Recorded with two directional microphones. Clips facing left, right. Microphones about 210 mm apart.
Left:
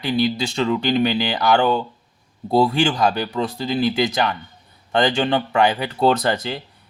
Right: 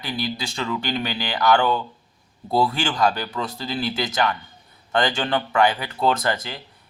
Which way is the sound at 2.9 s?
15° left (ahead or behind).